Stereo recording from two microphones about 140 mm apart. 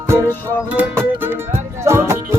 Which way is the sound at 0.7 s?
15° right (ahead or behind).